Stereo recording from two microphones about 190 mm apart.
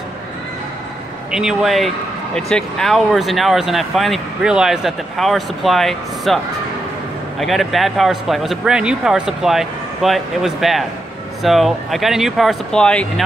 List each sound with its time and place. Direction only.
1.3 s speech: centre (ahead or behind)